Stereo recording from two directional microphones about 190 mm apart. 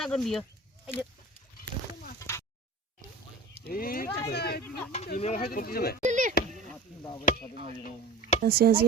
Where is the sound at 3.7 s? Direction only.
50° left (ahead or behind).